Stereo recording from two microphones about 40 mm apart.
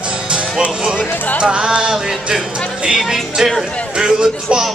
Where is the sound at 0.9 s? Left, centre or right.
Left.